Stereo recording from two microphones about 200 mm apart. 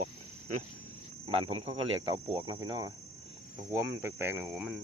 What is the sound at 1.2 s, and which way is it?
Speech, 30° right (ahead or behind).